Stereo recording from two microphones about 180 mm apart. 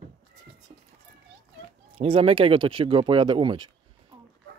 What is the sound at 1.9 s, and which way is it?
Speech, 30° right (ahead or behind).